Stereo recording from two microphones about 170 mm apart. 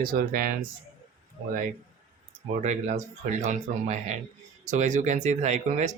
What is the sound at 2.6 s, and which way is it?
Speech, 45° right (ahead or behind).